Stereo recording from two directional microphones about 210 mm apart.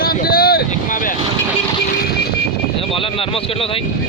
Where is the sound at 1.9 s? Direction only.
50° left (ahead or behind).